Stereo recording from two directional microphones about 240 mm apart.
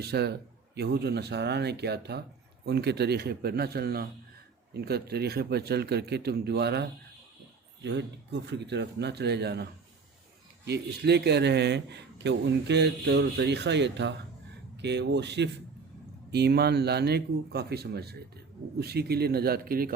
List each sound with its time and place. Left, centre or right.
0.0 s a man's voice: right
10.7 s a man's voice: right